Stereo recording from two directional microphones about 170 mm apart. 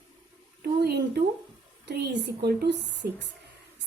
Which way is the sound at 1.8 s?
80° right.